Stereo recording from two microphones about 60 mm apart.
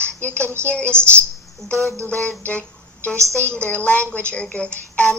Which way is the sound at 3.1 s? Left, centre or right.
Right.